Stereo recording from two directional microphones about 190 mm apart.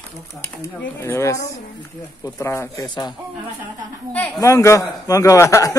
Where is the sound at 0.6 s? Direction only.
10° left (ahead or behind).